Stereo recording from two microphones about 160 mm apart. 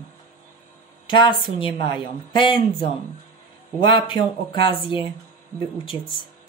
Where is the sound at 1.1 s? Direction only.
30° left (ahead or behind).